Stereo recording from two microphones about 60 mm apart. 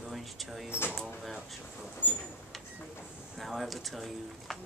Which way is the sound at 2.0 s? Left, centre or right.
Left.